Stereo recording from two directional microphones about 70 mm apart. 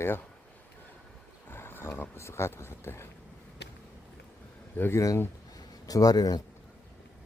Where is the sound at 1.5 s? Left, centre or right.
Left.